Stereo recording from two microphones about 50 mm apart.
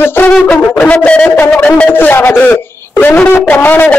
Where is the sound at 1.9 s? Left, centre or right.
Left.